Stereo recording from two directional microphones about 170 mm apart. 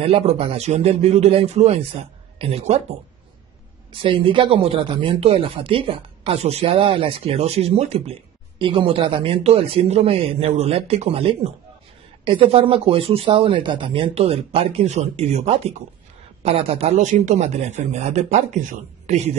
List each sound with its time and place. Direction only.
0.0 s speech: 35° right (ahead or behind)
4.0 s speech: 30° right (ahead or behind)